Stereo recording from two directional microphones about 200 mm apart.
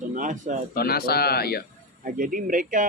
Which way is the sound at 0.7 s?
50° left (ahead or behind).